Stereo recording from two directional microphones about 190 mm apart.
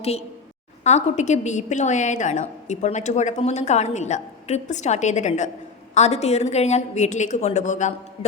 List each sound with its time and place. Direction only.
0.9 s a woman's voice: 40° left (ahead or behind)